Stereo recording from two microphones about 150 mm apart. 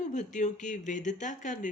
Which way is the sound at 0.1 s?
55° left (ahead or behind).